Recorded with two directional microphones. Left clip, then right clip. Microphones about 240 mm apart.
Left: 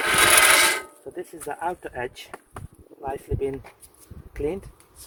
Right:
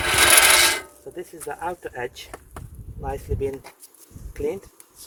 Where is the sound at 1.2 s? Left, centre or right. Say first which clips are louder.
Even; left.